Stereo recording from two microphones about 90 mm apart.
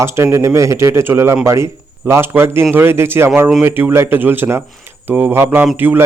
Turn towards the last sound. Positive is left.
turn(degrees=-25)  # may be behind; listen again after turning